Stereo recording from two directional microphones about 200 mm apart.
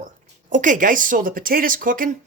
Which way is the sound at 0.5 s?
40° right (ahead or behind).